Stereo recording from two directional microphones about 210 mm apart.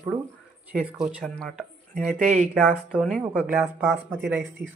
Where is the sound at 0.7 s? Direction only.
5° right (ahead or behind).